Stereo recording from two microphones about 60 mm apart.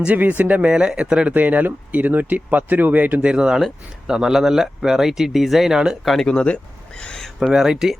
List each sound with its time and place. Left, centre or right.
0.0 s speech: right
0.7 s speech: centre
3.2 s speech: centre
6.1 s speech: centre
6.3 s speech: centre
7.5 s speech: centre